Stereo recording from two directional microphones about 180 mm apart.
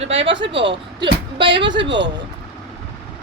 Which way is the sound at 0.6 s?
25° right (ahead or behind).